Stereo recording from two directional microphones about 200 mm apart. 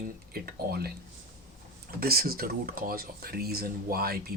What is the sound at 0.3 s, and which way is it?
Speech, 50° right (ahead or behind).